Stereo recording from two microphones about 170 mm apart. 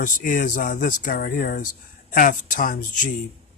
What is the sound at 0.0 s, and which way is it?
A man's voice, 55° left (ahead or behind).